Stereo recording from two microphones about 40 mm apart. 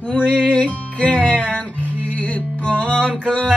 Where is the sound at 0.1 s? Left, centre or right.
Left.